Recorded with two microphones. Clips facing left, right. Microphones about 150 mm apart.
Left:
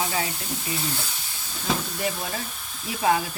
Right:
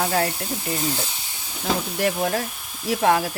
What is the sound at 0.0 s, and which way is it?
Speech, 60° right (ahead or behind).